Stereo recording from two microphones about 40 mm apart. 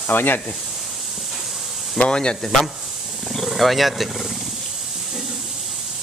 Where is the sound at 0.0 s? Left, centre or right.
Left.